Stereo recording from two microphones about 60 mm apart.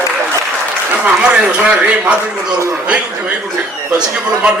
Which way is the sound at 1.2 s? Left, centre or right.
Centre.